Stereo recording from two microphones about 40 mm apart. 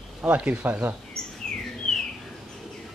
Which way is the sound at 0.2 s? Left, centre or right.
Right.